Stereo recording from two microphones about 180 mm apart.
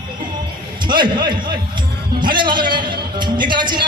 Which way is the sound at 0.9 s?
25° right (ahead or behind).